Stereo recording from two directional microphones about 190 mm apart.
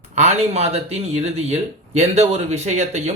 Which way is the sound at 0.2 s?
35° right (ahead or behind).